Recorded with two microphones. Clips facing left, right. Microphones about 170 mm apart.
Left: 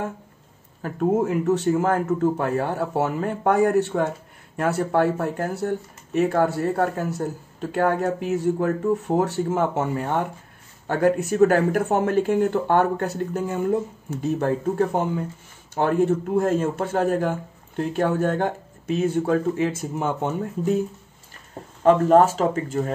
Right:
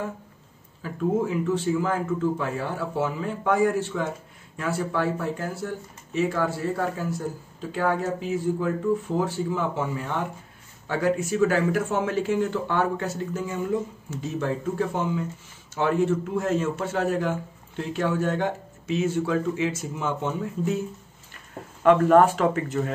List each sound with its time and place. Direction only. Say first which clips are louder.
0.8 s speech: left 3 dB; 60° left (ahead or behind)
1.5 s speech: left 5 dB; 70° left (ahead or behind)
1.8 s a man's voice: left 4 dB; 50° left (ahead or behind)
21.8 s speech: left 1 dB; 35° left (ahead or behind)